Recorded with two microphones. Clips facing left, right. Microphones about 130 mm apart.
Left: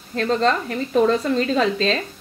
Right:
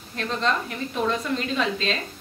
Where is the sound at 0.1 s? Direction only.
40° left (ahead or behind).